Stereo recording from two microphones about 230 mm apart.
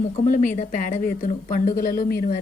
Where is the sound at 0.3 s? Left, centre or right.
Left.